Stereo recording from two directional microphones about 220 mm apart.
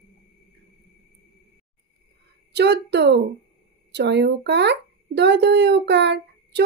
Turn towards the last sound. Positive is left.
turn(degrees=-50)  # may be behind; listen again after turning